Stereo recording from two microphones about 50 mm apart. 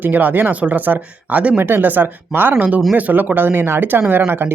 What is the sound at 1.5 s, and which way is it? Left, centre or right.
Speech, right.